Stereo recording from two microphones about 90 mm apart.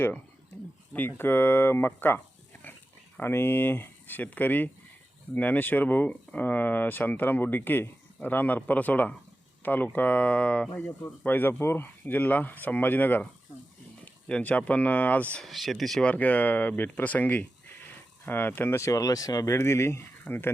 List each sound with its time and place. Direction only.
0.9 s speech: 25° left (ahead or behind)
10.8 s speech: 30° left (ahead or behind)
15.4 s speech: centre (ahead or behind)
16.0 s speech: 15° left (ahead or behind); by 19.5 s 40° left (ahead or behind)
19.5 s speech: 30° left (ahead or behind)